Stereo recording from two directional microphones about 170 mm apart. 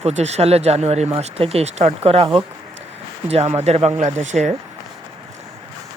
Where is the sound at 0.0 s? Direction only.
40° right (ahead or behind).